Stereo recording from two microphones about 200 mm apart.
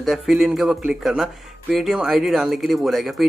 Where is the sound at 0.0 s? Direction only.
Centre (ahead or behind).